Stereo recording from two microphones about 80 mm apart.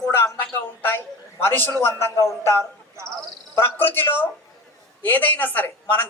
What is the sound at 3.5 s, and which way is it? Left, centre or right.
Speech, left.